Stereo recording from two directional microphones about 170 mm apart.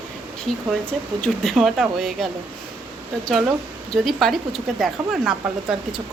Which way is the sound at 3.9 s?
Centre (ahead or behind).